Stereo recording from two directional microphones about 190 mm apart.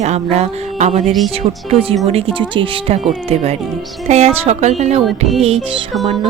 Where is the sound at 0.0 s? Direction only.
35° right (ahead or behind).